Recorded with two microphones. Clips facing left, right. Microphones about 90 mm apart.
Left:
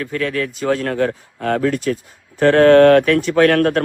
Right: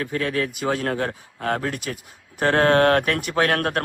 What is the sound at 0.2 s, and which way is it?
Speech, 20° right (ahead or behind).